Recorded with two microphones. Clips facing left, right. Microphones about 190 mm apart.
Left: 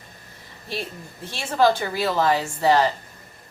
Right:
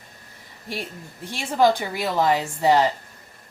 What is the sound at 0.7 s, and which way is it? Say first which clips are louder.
A woman's voice: left 1 dB; 15° right (ahead or behind).